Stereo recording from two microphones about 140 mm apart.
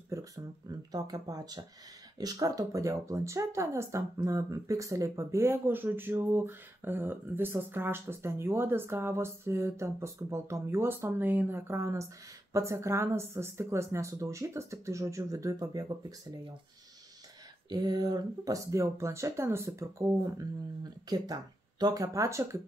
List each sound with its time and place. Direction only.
0.1 s speech: 25° right (ahead or behind)
17.6 s speech: 30° right (ahead or behind)